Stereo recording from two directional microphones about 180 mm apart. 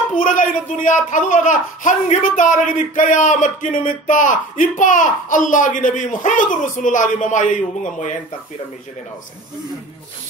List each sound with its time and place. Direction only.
0.1 s speech: 45° left (ahead or behind)